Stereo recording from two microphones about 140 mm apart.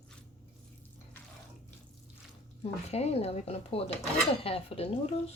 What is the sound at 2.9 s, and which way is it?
Speech, 50° left (ahead or behind).